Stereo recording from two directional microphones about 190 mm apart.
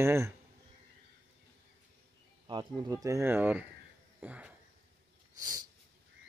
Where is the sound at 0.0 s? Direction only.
15° right (ahead or behind).